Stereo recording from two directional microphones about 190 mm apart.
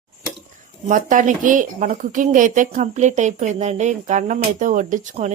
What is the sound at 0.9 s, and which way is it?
A woman's voice, 45° right (ahead or behind).